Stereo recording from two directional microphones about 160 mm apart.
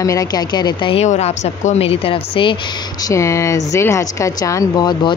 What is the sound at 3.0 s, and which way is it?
Speech, 20° left (ahead or behind).